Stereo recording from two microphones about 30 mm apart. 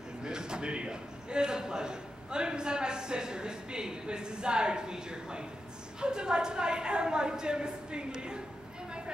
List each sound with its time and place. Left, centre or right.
0.2 s a man's voice: right